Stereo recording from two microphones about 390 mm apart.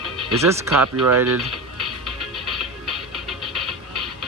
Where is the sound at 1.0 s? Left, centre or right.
Right.